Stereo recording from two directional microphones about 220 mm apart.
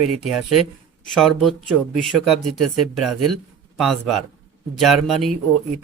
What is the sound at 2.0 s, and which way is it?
A man's voice, centre (ahead or behind).